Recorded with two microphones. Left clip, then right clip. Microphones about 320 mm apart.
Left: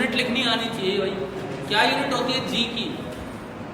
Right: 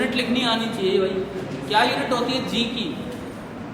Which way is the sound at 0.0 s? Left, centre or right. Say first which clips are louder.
Even; centre.